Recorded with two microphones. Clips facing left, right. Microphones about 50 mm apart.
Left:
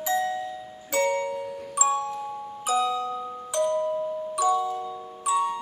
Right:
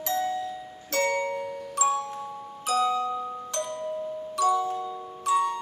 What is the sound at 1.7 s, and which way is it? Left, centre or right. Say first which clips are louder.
Glockenspiel: left 1 dB; centre.